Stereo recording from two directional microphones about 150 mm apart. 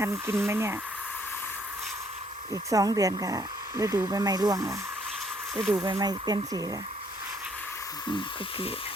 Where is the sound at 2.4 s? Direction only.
25° right (ahead or behind).